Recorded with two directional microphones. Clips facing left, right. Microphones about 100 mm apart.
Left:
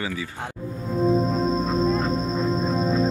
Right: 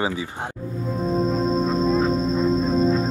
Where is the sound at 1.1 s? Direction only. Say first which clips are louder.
Even; centre (ahead or behind).